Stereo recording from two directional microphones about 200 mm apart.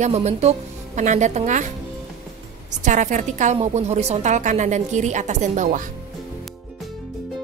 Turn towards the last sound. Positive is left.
turn(degrees=-40)  # may be behind; listen again after turning